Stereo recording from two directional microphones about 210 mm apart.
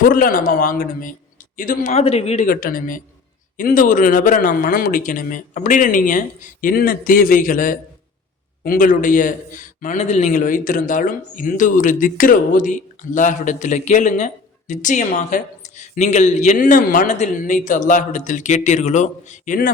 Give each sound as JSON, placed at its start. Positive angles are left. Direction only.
{"t": 0.1, "sound": "a man's voice", "side_deg": 40}
{"t": 2.5, "sound": "a man's voice", "side_deg": 45}